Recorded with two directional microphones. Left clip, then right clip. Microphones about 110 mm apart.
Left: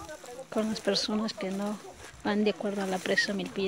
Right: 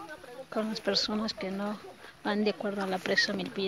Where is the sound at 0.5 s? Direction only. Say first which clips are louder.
Left 1 dB; 25° left (ahead or behind).